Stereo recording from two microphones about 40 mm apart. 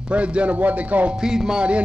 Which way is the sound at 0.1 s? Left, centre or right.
Right.